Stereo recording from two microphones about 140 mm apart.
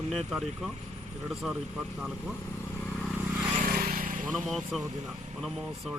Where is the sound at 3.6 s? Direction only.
90° right; by 4.2 s 75° right (ahead or behind).